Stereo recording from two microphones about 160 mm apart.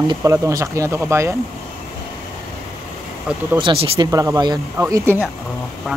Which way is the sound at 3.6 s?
35° right (ahead or behind).